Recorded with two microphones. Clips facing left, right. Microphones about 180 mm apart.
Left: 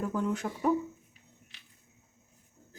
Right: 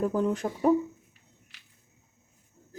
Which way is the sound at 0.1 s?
35° right (ahead or behind).